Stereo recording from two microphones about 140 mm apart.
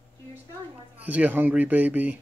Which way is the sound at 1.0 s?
10° right (ahead or behind).